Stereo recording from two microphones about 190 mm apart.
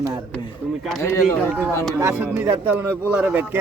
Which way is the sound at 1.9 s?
10° right (ahead or behind).